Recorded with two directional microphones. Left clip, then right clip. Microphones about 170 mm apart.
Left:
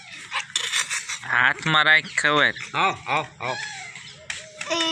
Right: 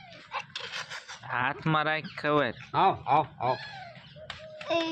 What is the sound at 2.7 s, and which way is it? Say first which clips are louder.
Speech: left 1 dB; 50° right (ahead or behind).